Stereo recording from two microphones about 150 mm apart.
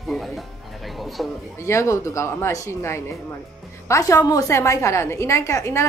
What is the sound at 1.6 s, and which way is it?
A woman's voice, 20° left (ahead or behind).